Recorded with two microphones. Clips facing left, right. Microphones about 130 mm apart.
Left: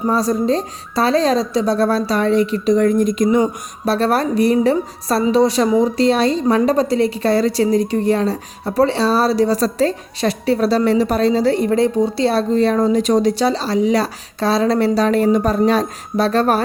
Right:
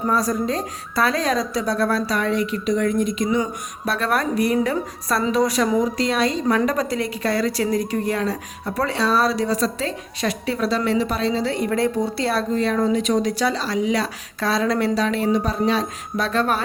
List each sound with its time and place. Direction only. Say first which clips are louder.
0.1 s speech: left 5 dB; 30° left (ahead or behind); by 3.4 s 45° left (ahead or behind)
3.4 s speech: left 7 dB; 30° left (ahead or behind)